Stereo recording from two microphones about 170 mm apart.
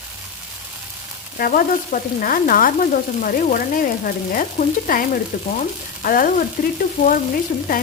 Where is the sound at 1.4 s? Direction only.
55° left (ahead or behind).